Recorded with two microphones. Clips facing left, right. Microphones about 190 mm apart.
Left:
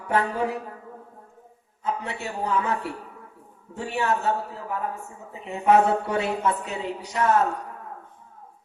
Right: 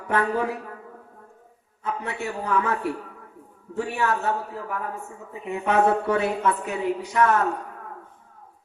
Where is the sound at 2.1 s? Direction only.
25° left (ahead or behind).